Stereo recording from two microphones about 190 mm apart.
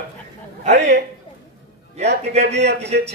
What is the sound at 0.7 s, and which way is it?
Speech, 60° right (ahead or behind).